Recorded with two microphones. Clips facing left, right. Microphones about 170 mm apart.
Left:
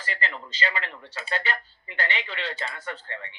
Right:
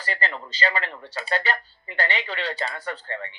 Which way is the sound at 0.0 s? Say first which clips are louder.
Right 3 dB; 35° right (ahead or behind).